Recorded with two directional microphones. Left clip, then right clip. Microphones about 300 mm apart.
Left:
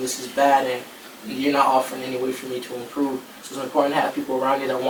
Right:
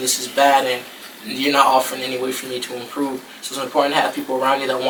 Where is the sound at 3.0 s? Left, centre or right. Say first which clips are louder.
Even; centre.